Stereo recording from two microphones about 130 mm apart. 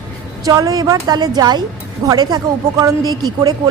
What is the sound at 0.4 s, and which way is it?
A woman's voice, 30° right (ahead or behind).